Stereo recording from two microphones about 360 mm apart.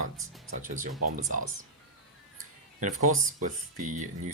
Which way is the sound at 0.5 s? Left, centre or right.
Right.